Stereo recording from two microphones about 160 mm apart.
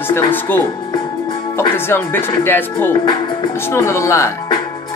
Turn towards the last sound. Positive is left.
turn(degrees=20)  # may be behind; listen again after turning